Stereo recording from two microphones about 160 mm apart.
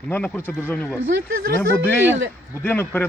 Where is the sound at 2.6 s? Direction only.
10° left (ahead or behind).